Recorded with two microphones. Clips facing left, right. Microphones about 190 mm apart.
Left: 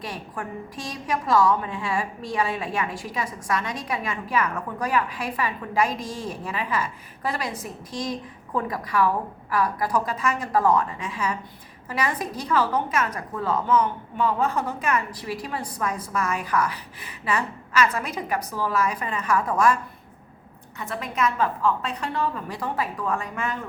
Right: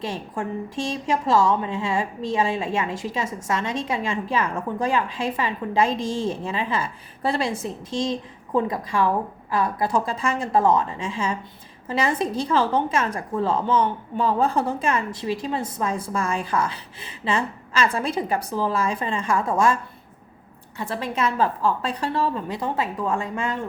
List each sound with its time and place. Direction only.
0.0 s a woman's voice: 25° right (ahead or behind)